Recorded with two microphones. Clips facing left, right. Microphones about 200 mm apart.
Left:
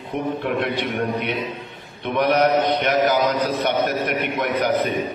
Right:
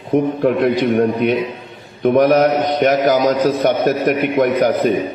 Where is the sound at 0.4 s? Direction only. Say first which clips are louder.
Right 8 dB; 40° right (ahead or behind).